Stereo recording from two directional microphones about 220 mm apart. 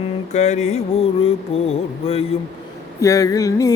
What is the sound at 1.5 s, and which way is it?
Music, 25° left (ahead or behind).